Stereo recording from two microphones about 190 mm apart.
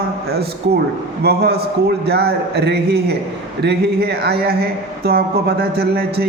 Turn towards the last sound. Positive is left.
turn(degrees=-55)  # may be behind; listen again after turning